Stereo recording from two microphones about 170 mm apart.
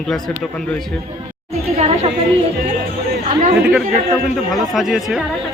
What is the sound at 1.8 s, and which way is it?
Speech, 35° right (ahead or behind).